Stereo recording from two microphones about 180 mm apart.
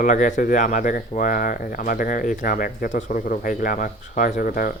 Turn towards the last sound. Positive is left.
turn(degrees=55)  # may be behind; listen again after turning